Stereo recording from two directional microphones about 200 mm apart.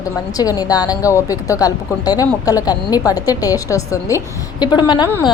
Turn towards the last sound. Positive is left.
turn(degrees=20)  # may be behind; listen again after turning